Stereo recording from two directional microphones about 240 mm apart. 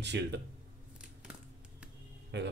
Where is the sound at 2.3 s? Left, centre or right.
Right.